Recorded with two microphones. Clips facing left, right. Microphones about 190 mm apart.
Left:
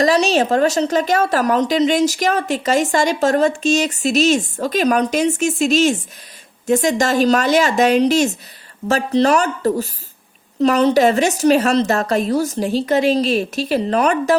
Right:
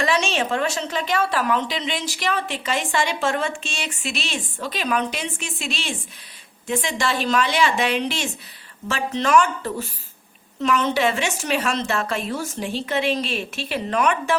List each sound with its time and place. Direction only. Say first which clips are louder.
0.0 s a woman's voice: left 7 dB; 40° left (ahead or behind)